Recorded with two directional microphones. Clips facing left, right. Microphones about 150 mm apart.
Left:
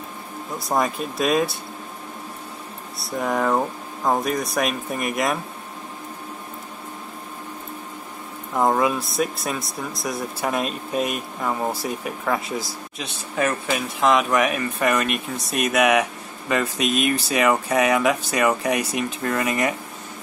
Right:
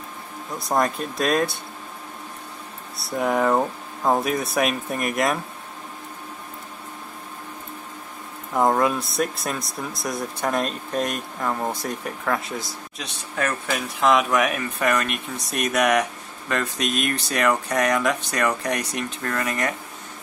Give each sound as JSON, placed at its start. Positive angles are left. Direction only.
{"t": 0.6, "sound": "speech", "side_deg": 0}
{"t": 3.0, "sound": "speech", "side_deg": 0}
{"t": 8.5, "sound": "speech", "side_deg": 0}